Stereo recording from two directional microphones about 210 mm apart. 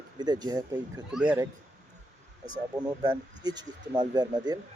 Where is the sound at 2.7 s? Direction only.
5° right (ahead or behind).